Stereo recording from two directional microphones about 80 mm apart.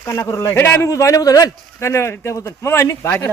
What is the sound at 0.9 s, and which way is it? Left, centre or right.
A man's voice, left.